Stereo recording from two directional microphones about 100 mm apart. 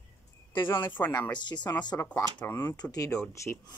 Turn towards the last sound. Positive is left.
turn(degrees=30)  # may be behind; listen again after turning